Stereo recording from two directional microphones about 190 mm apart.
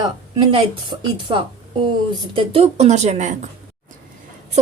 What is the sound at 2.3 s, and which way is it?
Speech, 30° right (ahead or behind).